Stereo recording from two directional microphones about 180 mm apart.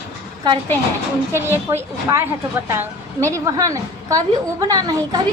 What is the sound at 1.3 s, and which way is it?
A woman's voice, 15° right (ahead or behind).